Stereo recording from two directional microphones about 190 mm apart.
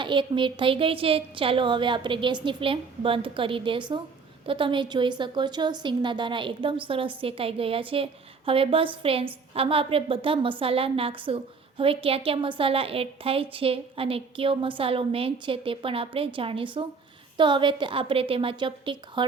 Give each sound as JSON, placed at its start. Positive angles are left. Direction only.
{"t": 0.0, "sound": "a woman's voice", "side_deg": -25}